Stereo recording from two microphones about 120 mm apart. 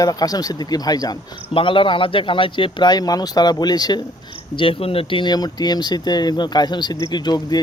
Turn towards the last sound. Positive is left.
turn(degrees=35)  # may be behind; listen again after turning